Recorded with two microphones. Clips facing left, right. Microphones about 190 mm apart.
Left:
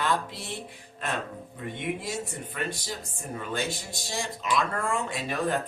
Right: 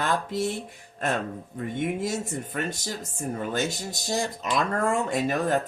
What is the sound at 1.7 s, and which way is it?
Speech, 45° right (ahead or behind).